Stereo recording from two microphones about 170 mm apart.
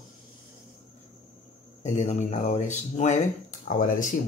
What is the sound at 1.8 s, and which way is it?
Speech, 40° left (ahead or behind).